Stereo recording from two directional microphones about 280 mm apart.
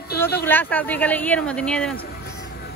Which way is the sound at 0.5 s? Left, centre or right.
Centre.